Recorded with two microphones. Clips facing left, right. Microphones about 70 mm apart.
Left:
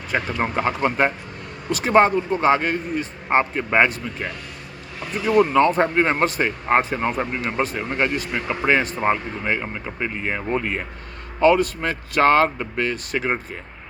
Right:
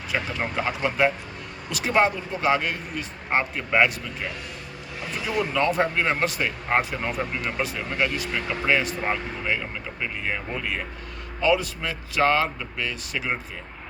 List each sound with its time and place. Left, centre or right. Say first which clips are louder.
0.3 s speech: left 5 dB; left
0.9 s speech: left 2 dB; left
5.2 s speech: left 8 dB; left
8.4 s speech: left 4 dB; left
8.7 s speech: left 4 dB; left
9.1 s speech: left 3 dB; left
11.3 s speech: left 6 dB; left